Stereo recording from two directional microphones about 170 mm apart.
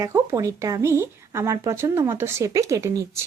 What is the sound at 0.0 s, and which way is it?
Speech, 20° right (ahead or behind).